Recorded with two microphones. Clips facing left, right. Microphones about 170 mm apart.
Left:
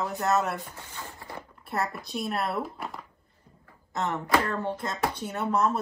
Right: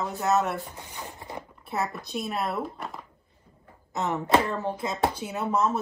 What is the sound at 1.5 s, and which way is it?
Speech, centre (ahead or behind).